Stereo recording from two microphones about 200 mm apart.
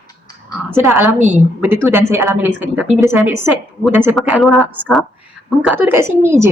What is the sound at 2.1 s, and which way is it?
A woman's voice, 10° right (ahead or behind).